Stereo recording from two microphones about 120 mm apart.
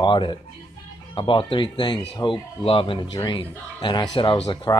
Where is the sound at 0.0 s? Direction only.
40° left (ahead or behind).